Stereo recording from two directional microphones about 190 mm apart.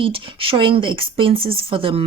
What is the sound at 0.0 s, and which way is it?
Speech, 30° right (ahead or behind).